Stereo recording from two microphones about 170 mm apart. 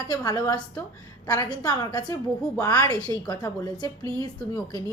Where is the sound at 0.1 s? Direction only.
20° left (ahead or behind).